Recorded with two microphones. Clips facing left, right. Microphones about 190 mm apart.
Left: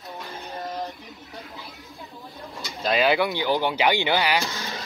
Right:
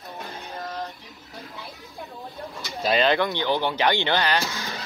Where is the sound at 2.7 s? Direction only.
Centre (ahead or behind).